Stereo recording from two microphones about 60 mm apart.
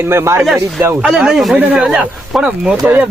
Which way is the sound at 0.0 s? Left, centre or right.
Right.